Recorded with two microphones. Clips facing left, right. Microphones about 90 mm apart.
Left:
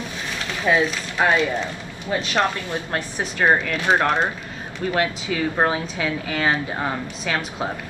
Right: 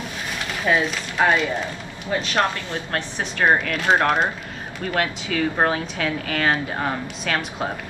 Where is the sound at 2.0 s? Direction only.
20° left (ahead or behind).